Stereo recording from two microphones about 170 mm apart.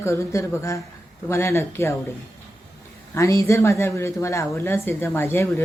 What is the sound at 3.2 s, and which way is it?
Speech, 15° left (ahead or behind).